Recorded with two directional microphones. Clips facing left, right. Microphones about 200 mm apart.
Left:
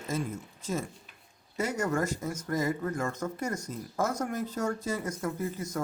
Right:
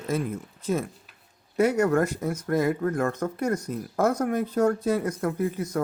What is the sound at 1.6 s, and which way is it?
Speech, 60° right (ahead or behind).